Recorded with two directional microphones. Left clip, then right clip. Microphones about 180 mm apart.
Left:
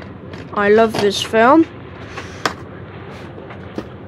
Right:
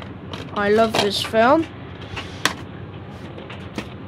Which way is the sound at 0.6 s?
15° left (ahead or behind).